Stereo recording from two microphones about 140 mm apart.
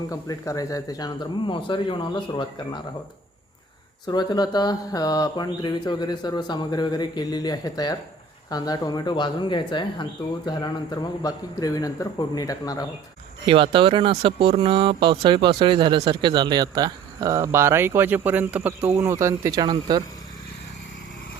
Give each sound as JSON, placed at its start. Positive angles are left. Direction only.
{"t": 0.1, "sound": "speech", "side_deg": 25}
{"t": 4.0, "sound": "speech", "side_deg": 30}
{"t": 13.4, "sound": "speech", "side_deg": -40}